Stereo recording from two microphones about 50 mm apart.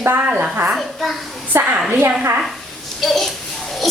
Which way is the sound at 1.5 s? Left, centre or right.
Right.